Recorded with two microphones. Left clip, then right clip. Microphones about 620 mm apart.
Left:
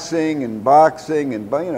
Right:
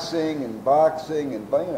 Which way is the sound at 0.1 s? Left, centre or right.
Left.